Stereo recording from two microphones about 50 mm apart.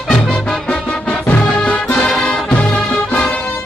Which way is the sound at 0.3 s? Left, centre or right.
Centre.